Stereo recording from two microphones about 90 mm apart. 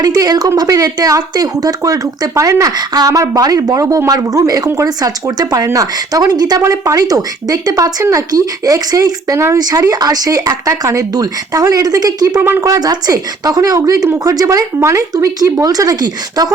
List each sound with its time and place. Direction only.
0.0 s a woman's voice: 45° right (ahead or behind)
6.6 s a woman's voice: 35° right (ahead or behind)
12.4 s speech: 25° right (ahead or behind)
12.7 s a woman's voice: 45° right (ahead or behind)